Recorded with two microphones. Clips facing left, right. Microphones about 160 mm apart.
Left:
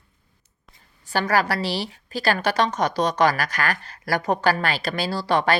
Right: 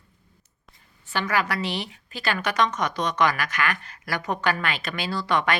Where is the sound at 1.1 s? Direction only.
35° left (ahead or behind).